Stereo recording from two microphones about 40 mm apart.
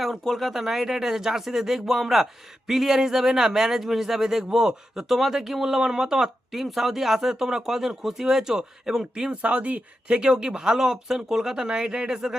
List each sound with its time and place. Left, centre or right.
0.0 s speech: centre
0.6 s speech: centre
9.3 s speech: right
10.1 s speech: right